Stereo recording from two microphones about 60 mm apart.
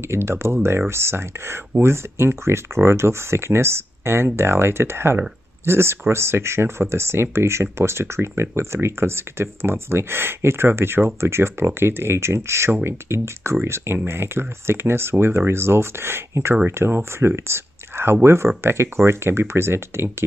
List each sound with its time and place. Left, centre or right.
0.1 s speech: right